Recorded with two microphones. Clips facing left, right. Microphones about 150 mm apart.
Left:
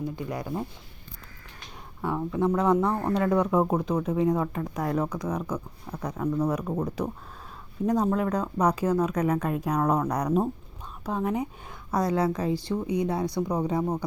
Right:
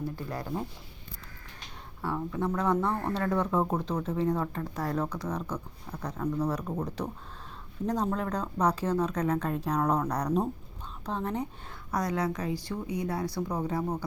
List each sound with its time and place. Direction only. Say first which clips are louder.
0.0 s speech: left 3 dB; 15° left (ahead or behind)
2.0 s speech: left 5 dB; 20° left (ahead or behind)
11.9 s a woman's voice: left 5 dB; 30° left (ahead or behind)